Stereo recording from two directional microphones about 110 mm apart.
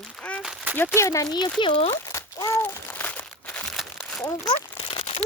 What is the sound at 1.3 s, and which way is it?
Speech, 40° left (ahead or behind).